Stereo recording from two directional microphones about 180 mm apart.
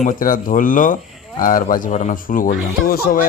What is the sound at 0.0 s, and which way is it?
Speech, 45° left (ahead or behind).